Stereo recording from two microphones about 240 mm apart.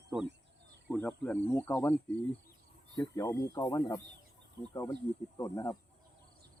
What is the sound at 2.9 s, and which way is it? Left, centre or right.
Speech, centre.